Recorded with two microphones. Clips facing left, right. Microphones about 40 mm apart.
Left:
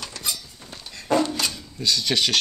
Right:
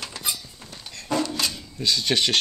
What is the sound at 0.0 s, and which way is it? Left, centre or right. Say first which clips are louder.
Cutlery: even; centre.